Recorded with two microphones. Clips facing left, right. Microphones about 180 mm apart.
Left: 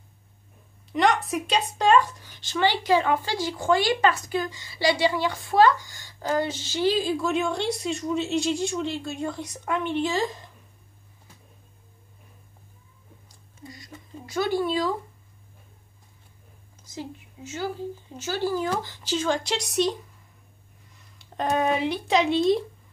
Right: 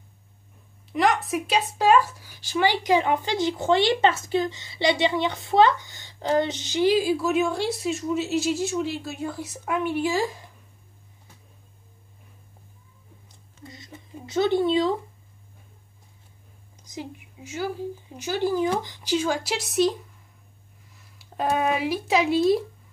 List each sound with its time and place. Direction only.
0.9 s speech: centre (ahead or behind)
13.7 s a sound: 25° right (ahead or behind)
14.2 s speech: 20° right (ahead or behind)
16.8 s speech: 15° right (ahead or behind)